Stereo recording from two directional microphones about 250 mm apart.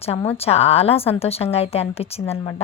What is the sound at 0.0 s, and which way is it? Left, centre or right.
A woman's voice, left.